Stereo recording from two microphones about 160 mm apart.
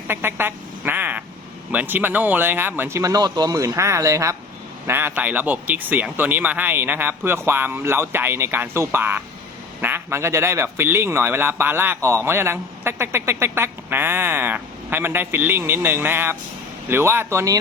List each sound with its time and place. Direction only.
0.1 s speech: 15° right (ahead or behind)